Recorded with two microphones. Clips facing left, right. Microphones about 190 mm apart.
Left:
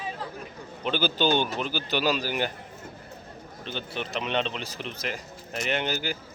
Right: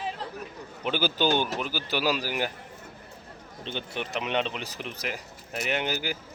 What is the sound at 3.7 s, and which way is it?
Speech, 15° right (ahead or behind).